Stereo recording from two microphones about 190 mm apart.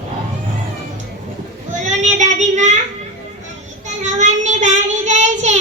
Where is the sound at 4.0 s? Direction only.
40° right (ahead or behind).